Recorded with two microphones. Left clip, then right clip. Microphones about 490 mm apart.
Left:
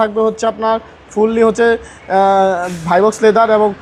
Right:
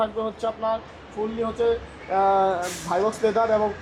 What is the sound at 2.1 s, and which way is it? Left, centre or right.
Speech, left.